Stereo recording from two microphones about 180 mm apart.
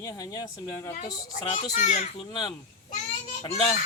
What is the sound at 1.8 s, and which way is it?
Speech, 40° left (ahead or behind).